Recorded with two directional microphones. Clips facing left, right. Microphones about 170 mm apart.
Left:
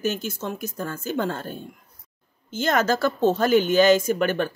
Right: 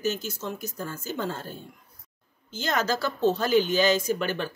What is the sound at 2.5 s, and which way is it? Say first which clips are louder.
A woman's voice: left 5 dB; 50° left (ahead or behind).